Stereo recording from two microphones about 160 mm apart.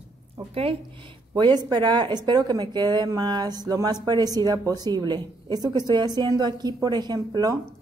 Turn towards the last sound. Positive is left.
turn(degrees=-25)  # may be behind; listen again after turning